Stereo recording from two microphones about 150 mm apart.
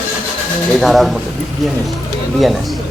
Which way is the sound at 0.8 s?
Centre (ahead or behind).